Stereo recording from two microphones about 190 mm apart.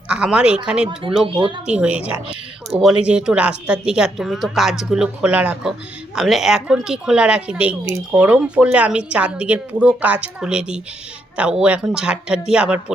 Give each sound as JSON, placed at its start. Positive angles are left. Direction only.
{"t": 0.1, "sound": "speech", "side_deg": -5}
{"t": 1.2, "sound": "speech", "side_deg": -25}
{"t": 1.6, "sound": "a woman's voice", "side_deg": -5}